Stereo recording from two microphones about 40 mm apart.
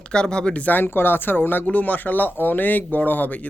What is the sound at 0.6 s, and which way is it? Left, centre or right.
Speech, left.